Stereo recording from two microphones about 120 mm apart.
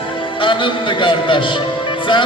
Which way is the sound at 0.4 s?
45° left (ahead or behind).